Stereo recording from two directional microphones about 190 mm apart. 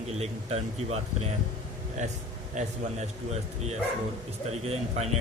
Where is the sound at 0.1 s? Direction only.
35° right (ahead or behind).